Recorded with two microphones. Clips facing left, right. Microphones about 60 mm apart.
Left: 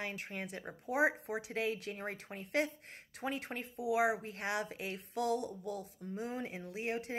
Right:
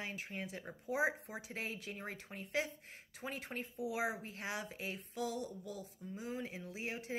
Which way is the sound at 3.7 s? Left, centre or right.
Left.